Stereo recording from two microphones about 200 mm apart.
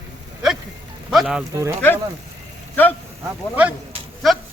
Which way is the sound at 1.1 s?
5° right (ahead or behind).